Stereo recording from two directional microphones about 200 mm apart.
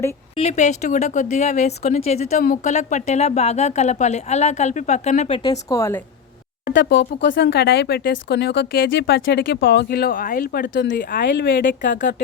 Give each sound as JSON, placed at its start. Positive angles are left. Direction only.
{"t": 0.3, "sound": "speech", "side_deg": 35}
{"t": 5.4, "sound": "speech", "side_deg": 20}
{"t": 6.7, "sound": "speech", "side_deg": 60}